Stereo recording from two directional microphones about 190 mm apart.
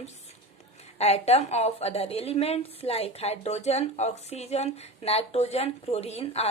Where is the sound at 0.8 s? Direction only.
35° left (ahead or behind).